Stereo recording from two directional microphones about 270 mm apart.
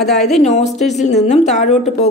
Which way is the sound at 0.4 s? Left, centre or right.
Left.